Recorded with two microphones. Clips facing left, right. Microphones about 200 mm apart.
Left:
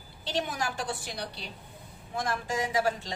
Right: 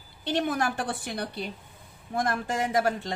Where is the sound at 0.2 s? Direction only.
55° right (ahead or behind).